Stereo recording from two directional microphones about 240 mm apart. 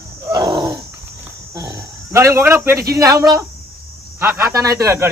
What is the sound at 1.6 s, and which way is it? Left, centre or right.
Speech, centre.